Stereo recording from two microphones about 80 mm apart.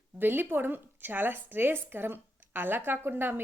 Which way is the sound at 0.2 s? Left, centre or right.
Right.